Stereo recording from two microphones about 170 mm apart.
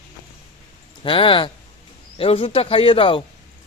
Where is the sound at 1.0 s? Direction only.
30° left (ahead or behind).